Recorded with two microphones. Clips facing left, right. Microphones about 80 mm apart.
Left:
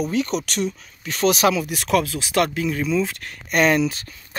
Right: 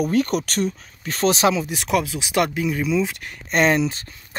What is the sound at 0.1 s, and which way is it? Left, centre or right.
Speech, right.